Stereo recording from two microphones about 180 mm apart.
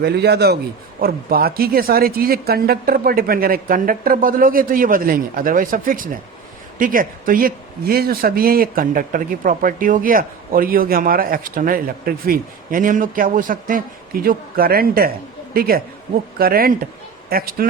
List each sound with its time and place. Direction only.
0.0 s speech: 65° right (ahead or behind)